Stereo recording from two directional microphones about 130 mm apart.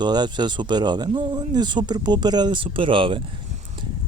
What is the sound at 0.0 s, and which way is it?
Speech, 35° right (ahead or behind).